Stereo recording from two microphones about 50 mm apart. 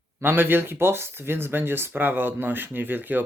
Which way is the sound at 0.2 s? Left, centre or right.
Right.